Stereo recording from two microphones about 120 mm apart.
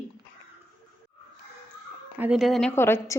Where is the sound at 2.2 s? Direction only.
5° right (ahead or behind).